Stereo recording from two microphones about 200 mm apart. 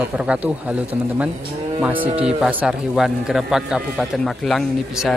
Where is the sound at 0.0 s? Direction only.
5° right (ahead or behind).